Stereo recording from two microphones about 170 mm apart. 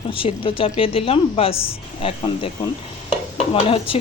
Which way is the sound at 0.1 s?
30° left (ahead or behind).